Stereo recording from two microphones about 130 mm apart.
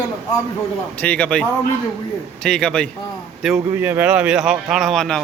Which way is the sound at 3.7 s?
15° right (ahead or behind).